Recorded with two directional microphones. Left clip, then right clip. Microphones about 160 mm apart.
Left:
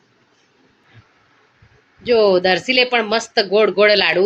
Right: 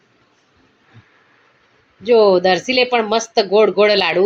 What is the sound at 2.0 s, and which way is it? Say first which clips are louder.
Speech: right 2 dB; 10° right (ahead or behind).